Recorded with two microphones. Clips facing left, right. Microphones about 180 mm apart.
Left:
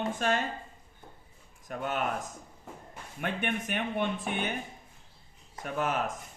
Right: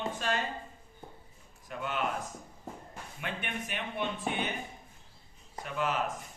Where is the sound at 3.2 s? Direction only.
50° left (ahead or behind).